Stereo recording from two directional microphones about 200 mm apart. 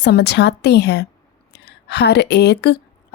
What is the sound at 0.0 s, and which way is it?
A woman's voice, 55° left (ahead or behind).